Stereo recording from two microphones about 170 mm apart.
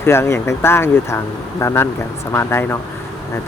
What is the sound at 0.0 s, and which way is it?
Speech, 15° left (ahead or behind).